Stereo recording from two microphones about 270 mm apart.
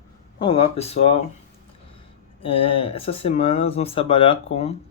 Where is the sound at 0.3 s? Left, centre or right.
Centre.